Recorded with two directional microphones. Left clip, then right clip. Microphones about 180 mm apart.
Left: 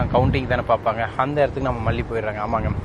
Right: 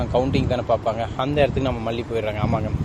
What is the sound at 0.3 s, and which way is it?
Speech, 15° right (ahead or behind).